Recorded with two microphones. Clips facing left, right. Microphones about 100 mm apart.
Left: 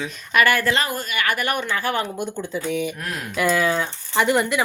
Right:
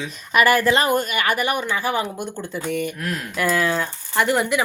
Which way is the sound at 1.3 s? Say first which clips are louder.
Right 2 dB; 10° right (ahead or behind).